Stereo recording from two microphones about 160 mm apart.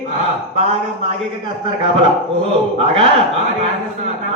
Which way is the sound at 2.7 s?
35° right (ahead or behind).